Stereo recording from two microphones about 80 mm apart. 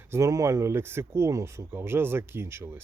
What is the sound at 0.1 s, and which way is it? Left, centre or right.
Speech, right.